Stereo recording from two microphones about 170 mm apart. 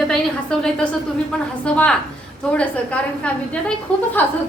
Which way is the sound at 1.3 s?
5° left (ahead or behind).